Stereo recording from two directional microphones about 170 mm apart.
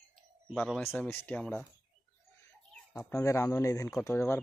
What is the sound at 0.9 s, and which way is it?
Speech, 10° left (ahead or behind).